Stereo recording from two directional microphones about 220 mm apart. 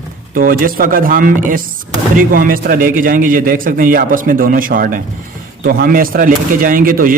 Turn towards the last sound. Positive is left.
turn(degrees=-40)  # may be behind; listen again after turning